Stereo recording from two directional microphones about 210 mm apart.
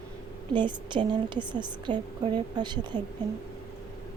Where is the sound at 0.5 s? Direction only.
20° right (ahead or behind).